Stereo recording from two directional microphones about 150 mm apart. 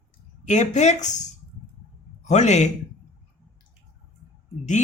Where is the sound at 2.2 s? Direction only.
50° left (ahead or behind).